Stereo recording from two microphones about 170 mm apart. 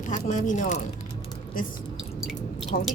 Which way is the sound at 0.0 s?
45° left (ahead or behind).